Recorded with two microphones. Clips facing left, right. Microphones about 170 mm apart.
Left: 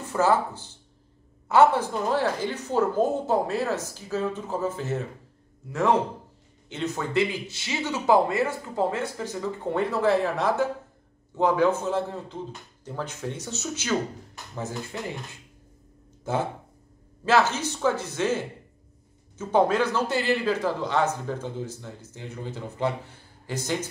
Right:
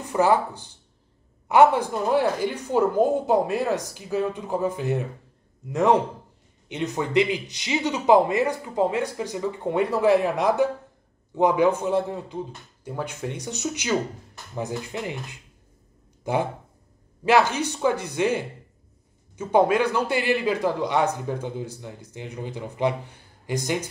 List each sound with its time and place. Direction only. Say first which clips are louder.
0.1 s a man's voice: right 2 dB; 15° right (ahead or behind)
16.3 s a man's voice: right 3 dB; 15° right (ahead or behind)